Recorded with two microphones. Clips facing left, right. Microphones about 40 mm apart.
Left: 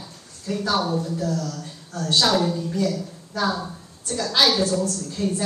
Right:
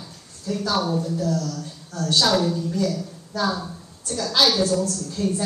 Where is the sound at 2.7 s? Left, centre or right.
Left.